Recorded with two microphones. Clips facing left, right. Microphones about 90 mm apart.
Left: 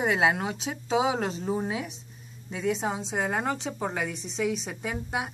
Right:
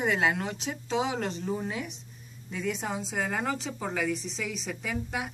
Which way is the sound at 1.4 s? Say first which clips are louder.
Left 3 dB; 35° left (ahead or behind).